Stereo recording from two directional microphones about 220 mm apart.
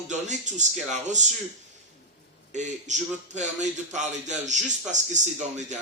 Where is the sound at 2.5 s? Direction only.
35° right (ahead or behind).